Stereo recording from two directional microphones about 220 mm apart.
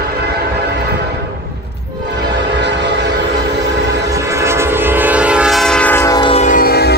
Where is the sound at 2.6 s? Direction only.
50° right (ahead or behind).